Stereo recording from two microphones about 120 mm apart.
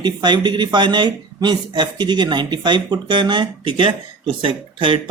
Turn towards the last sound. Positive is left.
turn(degrees=-45)  # may be behind; listen again after turning